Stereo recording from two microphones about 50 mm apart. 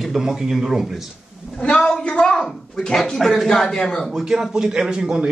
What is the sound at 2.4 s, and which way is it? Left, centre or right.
Speech, centre.